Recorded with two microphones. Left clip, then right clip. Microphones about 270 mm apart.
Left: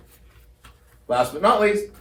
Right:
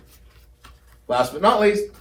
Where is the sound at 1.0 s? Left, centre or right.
Right.